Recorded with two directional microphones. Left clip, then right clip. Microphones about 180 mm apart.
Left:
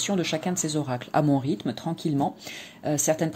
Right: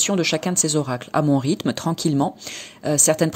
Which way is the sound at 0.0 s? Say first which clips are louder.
Right 6 dB; 25° right (ahead or behind).